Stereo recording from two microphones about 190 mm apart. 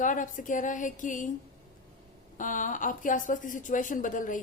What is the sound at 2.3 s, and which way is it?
A woman's voice, 45° left (ahead or behind).